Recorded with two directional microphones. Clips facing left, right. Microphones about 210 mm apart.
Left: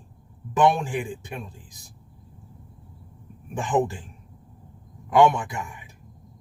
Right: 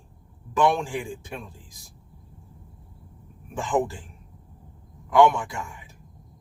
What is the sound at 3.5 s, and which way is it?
Speech, 20° left (ahead or behind).